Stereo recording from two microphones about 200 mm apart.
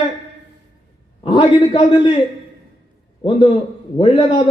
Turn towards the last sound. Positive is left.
turn(degrees=25)  # may be behind; listen again after turning